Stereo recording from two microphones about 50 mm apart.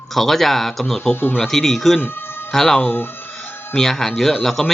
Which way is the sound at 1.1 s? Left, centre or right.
Left.